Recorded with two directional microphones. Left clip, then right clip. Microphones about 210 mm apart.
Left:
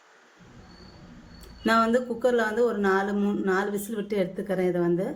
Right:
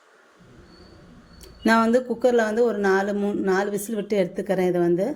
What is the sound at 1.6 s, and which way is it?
Speech, 30° right (ahead or behind).